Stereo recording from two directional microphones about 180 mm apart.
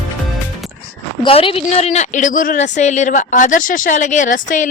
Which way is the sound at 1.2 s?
30° left (ahead or behind).